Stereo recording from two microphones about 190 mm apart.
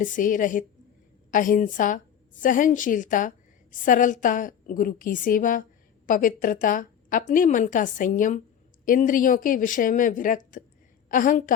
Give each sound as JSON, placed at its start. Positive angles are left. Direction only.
{"t": 0.0, "sound": "a woman's voice", "side_deg": 45}